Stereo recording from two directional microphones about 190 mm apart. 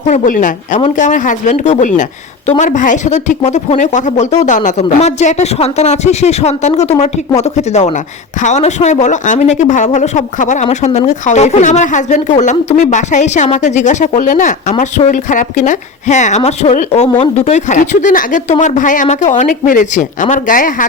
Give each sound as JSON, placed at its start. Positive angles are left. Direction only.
{"t": 0.1, "sound": "speech", "side_deg": 40}